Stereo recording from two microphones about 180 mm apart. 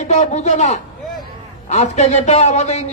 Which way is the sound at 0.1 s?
40° left (ahead or behind).